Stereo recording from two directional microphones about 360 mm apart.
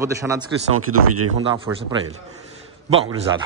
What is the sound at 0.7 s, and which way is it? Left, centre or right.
Speech, right.